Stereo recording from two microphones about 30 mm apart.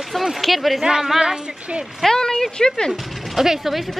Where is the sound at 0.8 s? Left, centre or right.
Centre.